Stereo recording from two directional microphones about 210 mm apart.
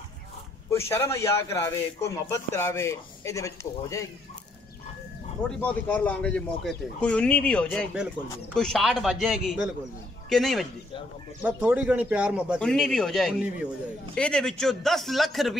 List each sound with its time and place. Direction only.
0.7 s speech: 10° left (ahead or behind)
5.6 s speech: 5° left (ahead or behind)